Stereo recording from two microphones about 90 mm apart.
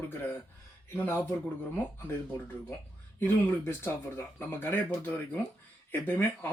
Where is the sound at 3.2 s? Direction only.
25° left (ahead or behind).